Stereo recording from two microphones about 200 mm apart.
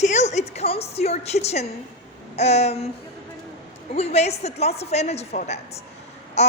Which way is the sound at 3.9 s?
30° left (ahead or behind).